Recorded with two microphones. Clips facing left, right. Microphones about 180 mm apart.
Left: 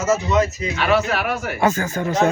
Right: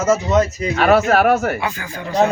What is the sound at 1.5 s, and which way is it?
Speech, 45° left (ahead or behind).